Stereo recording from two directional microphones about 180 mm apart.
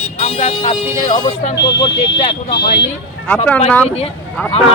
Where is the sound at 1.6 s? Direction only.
65° left (ahead or behind).